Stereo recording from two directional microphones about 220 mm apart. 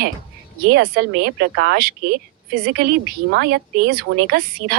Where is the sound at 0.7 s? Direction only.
45° right (ahead or behind).